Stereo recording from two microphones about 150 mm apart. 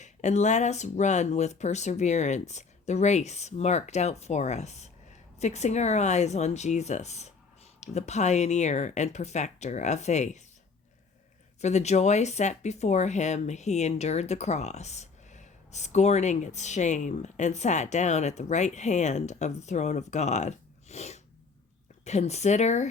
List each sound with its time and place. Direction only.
0.0 s speech: 50° left (ahead or behind)
11.6 s speech: 50° left (ahead or behind)